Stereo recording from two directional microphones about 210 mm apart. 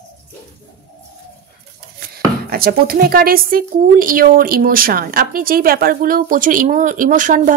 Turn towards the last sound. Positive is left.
turn(degrees=-40)  # may be behind; listen again after turning